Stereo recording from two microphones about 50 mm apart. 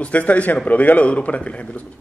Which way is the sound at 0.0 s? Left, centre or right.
Left.